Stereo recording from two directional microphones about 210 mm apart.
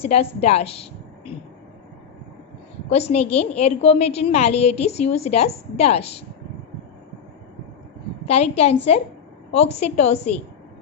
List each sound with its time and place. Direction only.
0.0 s a woman's voice: 30° left (ahead or behind)
2.9 s a woman's voice: 30° left (ahead or behind)
8.3 s a woman's voice: 30° left (ahead or behind)